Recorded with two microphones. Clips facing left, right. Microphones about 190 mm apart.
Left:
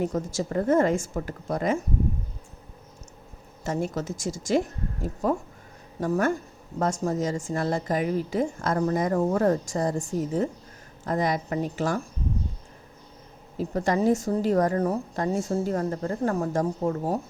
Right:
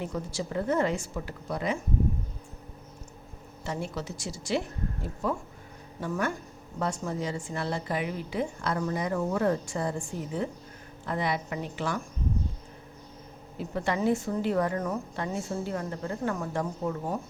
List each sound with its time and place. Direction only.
0.0 s a woman's voice: 45° left (ahead or behind)
3.6 s a woman's voice: 45° left (ahead or behind)
13.6 s speech: 40° left (ahead or behind)